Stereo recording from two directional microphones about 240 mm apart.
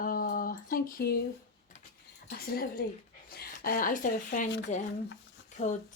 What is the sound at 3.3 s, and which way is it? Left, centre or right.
Speech, left.